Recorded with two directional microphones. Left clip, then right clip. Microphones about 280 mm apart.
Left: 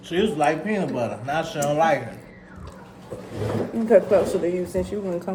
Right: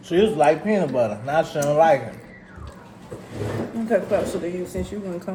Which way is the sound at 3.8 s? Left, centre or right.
Centre.